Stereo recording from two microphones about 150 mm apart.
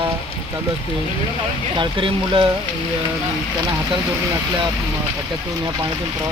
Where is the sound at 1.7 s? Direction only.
35° right (ahead or behind).